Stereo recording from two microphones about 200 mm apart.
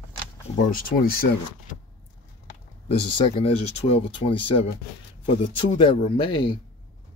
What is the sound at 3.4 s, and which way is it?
Speech, 30° left (ahead or behind).